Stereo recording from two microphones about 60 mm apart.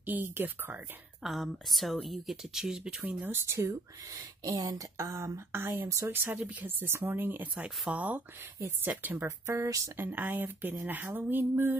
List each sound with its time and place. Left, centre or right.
0.0 s speech: right
1.2 s speech: centre
3.2 s speech: right
3.4 s speech: right
4.2 s speech: right
5.9 s speech: right
6.3 s speech: right
7.9 s speech: right
9.2 s speech: right
9.9 s speech: right